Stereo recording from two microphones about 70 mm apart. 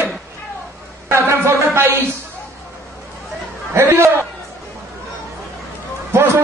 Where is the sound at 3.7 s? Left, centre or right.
Right.